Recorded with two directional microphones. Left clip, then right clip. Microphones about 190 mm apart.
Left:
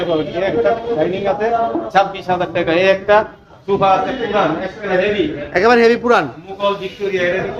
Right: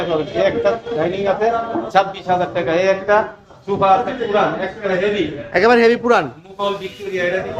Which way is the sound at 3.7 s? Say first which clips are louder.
Left 2 dB; 20° right (ahead or behind).